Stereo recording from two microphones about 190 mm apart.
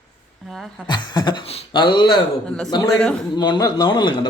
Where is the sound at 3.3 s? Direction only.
20° left (ahead or behind).